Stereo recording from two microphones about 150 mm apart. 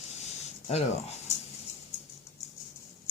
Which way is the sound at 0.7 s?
45° left (ahead or behind).